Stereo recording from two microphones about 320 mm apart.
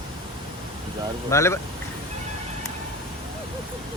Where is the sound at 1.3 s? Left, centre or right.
Centre.